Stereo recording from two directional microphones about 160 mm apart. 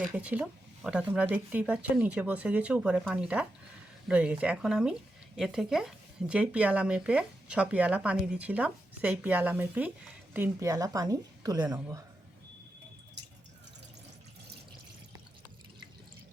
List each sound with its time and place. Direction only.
0.1 s a woman's voice: 10° right (ahead or behind); by 12.0 s 25° right (ahead or behind)